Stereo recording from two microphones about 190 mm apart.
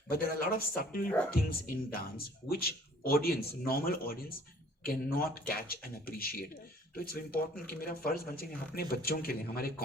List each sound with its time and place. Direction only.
0.1 s speech: 50° left (ahead or behind)